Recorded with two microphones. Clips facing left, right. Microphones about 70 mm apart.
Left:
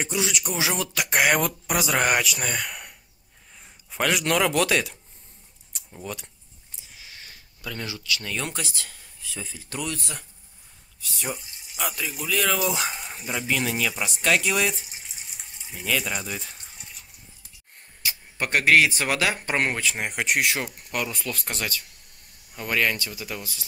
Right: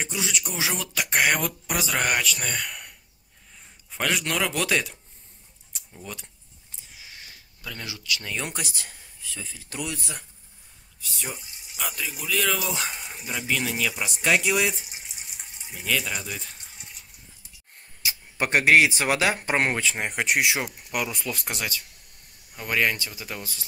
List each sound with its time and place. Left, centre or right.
0.0 s speech: centre
3.9 s speech: centre
6.0 s speech: centre
7.8 s speech: centre
9.2 s speech: centre
9.7 s speech: centre
11.8 s speech: centre
18.0 s speech: centre